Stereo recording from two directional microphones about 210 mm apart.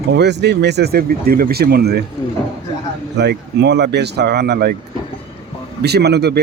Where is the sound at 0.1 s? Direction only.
55° right (ahead or behind).